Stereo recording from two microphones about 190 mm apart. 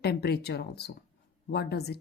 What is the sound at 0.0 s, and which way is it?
Speech, 60° left (ahead or behind).